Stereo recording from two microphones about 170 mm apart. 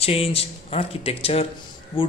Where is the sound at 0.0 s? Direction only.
35° left (ahead or behind).